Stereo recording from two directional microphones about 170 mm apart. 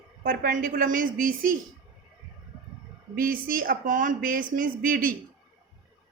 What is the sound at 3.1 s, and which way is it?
A woman's voice, 55° right (ahead or behind).